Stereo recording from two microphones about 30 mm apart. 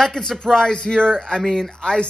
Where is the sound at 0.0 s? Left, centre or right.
Centre.